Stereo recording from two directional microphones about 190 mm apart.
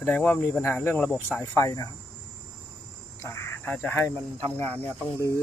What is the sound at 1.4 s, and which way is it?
Speech, 15° left (ahead or behind).